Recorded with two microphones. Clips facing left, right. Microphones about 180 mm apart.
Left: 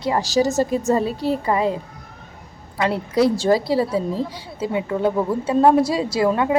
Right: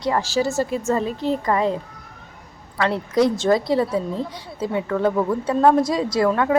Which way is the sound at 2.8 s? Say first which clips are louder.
Even; 20° left (ahead or behind).